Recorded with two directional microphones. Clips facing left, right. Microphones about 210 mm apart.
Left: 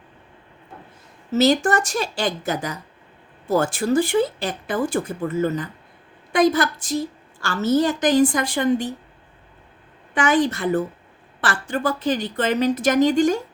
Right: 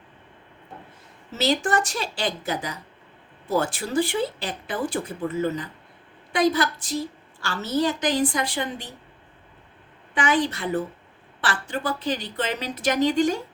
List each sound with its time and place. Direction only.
1.3 s speech: 45° left (ahead or behind)
10.2 s speech: 45° left (ahead or behind)